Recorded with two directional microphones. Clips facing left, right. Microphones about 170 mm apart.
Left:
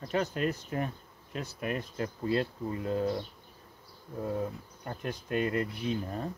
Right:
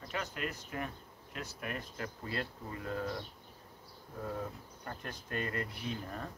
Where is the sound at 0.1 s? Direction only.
35° left (ahead or behind).